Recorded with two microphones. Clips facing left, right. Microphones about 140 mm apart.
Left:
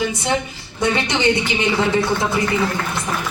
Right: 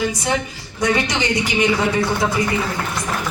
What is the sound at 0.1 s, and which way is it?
Speech, 25° left (ahead or behind).